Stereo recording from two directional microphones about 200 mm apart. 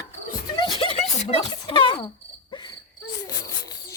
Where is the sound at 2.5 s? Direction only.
20° left (ahead or behind).